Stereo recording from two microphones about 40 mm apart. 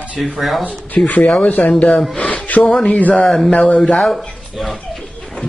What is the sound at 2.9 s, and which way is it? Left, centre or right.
Speech, left.